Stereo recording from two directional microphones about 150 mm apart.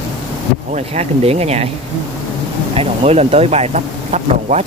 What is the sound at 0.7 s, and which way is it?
Speech, 45° right (ahead or behind).